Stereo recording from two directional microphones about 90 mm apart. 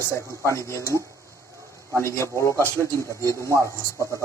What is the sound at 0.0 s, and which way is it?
Speech, 30° left (ahead or behind).